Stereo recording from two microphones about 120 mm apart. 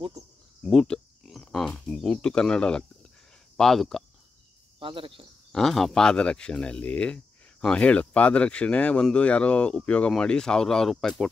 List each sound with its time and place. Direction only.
0.6 s a sound: 5° left (ahead or behind)
3.5 s speech: centre (ahead or behind)
4.7 s speech: 45° right (ahead or behind)
5.5 s speech: centre (ahead or behind)